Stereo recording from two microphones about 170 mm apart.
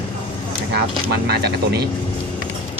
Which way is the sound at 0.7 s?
75° right (ahead or behind).